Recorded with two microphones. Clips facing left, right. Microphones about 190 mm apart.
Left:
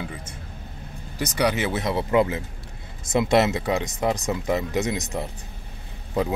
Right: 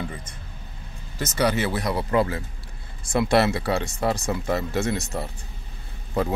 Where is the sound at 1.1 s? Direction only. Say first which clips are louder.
Even; 15° left (ahead or behind).